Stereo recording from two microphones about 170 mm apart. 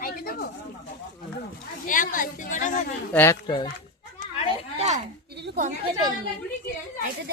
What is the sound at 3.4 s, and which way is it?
Speech, 30° left (ahead or behind).